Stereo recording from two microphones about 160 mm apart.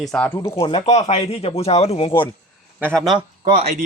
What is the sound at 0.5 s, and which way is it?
Speech, 35° left (ahead or behind).